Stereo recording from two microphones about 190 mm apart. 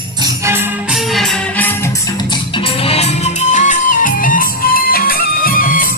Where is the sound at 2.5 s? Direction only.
30° left (ahead or behind).